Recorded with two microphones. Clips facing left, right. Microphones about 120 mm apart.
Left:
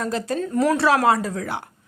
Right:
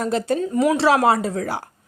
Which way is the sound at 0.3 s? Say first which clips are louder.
Even; 15° right (ahead or behind).